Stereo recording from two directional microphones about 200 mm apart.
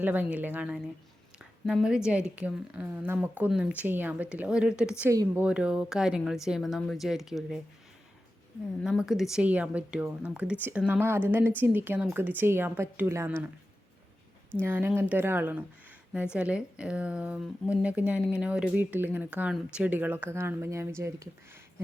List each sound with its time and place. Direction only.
0.0 s speech: 10° right (ahead or behind)
1.4 s a sound: 5° right (ahead or behind)
2.0 s speech: 5° right (ahead or behind)
8.8 s speech: centre (ahead or behind)
14.6 s speech: 10° right (ahead or behind)